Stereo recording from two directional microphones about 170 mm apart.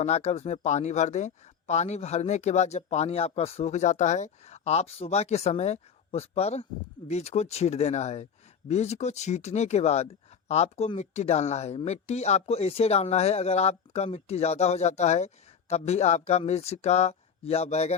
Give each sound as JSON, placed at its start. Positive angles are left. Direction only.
{"t": 0.0, "sound": "speech", "side_deg": 40}